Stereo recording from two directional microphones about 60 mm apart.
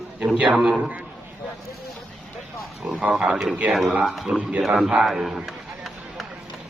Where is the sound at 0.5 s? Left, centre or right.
Centre.